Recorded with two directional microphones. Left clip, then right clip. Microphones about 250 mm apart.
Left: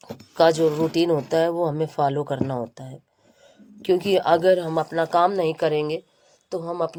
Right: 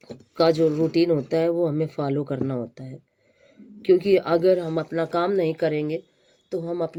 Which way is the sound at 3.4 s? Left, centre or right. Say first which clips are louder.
Right 3 dB; left.